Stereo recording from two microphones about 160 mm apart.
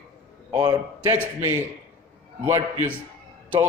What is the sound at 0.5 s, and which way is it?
Speech, 25° right (ahead or behind).